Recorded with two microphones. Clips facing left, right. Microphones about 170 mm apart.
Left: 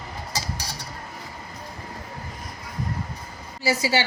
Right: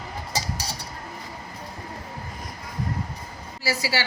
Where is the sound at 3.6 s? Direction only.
20° left (ahead or behind).